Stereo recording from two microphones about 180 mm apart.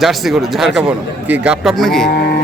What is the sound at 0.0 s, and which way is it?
Speech, centre (ahead or behind).